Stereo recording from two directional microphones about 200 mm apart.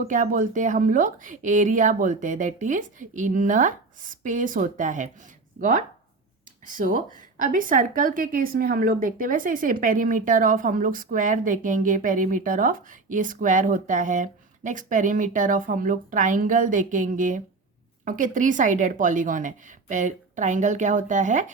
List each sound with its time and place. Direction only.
0.1 s speech: 40° right (ahead or behind)